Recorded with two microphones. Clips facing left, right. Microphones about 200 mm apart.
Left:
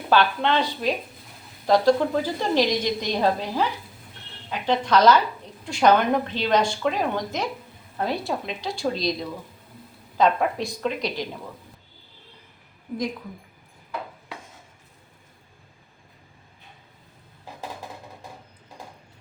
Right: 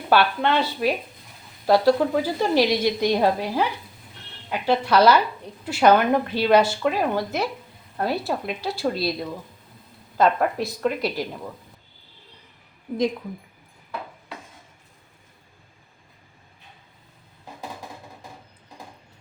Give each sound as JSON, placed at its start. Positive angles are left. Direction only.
{"t": 0.1, "sound": "a woman's voice", "side_deg": -10}
{"t": 10.2, "sound": "a woman's voice", "side_deg": -5}